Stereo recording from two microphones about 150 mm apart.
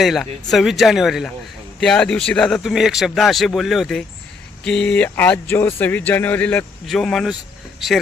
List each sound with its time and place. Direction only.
0.0 s speech: centre (ahead or behind)